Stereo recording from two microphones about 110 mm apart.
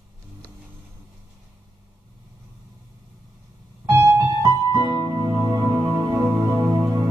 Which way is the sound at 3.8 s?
25° right (ahead or behind).